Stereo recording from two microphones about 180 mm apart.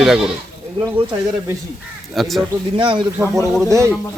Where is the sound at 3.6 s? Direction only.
15° right (ahead or behind).